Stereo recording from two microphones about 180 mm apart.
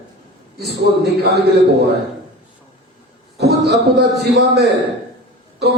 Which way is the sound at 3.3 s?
65° right (ahead or behind).